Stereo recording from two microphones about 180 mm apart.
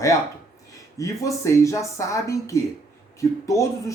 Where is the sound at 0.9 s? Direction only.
20° left (ahead or behind).